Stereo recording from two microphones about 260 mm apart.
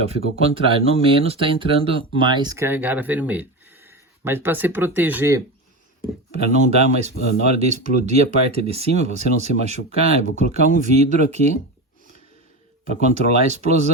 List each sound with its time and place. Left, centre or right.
0.0 s speech: right
6.3 s speech: right
12.9 s speech: right